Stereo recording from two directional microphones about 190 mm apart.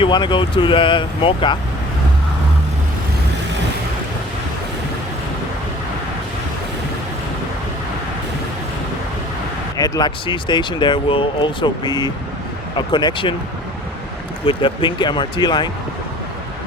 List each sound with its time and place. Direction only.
0.0 s speech: 25° left (ahead or behind)
9.7 s speech: 20° left (ahead or behind)
14.4 s speech: 25° left (ahead or behind)